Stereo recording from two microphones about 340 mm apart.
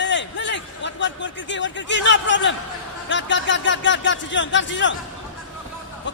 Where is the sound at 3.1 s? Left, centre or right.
Left.